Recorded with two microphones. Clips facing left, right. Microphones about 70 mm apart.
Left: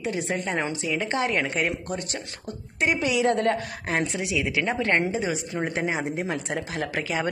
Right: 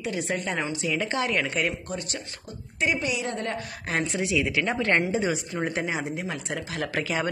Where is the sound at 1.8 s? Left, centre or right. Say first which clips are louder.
Left 2 dB; left.